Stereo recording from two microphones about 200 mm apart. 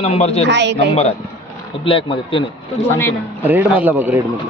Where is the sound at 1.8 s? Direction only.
25° left (ahead or behind).